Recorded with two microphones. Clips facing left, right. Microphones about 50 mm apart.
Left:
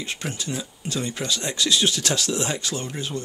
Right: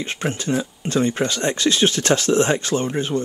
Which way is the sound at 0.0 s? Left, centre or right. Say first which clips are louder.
Right 6 dB; right.